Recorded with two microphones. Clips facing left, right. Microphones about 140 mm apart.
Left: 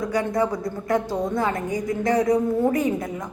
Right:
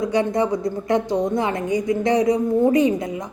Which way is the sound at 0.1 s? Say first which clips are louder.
Right 1 dB; 20° right (ahead or behind).